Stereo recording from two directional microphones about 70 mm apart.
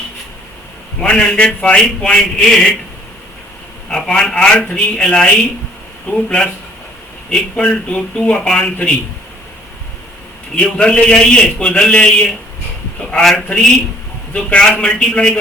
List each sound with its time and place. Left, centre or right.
1.0 s speech: centre
3.8 s speech: centre
10.5 s speech: centre
13.0 s a sound: centre
13.2 s speech: centre